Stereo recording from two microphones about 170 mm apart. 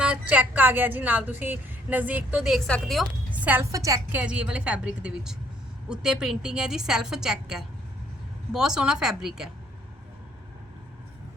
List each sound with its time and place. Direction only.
0.0 s a woman's voice: 5° right (ahead or behind)
4.2 s a woman's voice: 5° right (ahead or behind)